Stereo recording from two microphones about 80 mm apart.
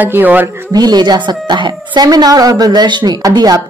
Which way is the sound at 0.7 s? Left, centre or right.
Right.